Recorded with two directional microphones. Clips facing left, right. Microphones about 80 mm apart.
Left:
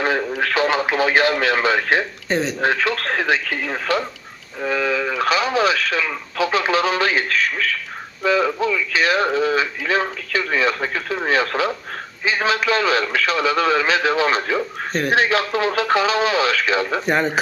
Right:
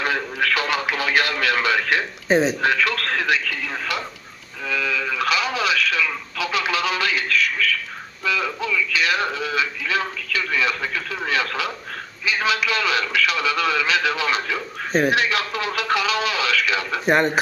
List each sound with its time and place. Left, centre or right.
0.0 s speech: left
3.4 s speech: left
17.1 s speech: centre